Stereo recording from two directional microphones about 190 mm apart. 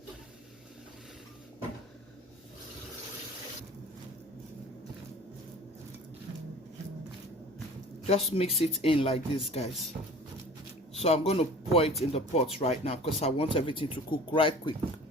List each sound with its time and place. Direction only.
8.3 s speech: 30° left (ahead or behind)
10.9 s a sound: 35° left (ahead or behind)
11.3 s speech: 30° left (ahead or behind)